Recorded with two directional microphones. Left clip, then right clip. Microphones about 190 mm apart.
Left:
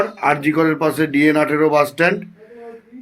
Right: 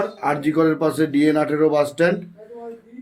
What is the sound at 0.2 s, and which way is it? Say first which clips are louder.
Speech: left 2 dB; 15° left (ahead or behind).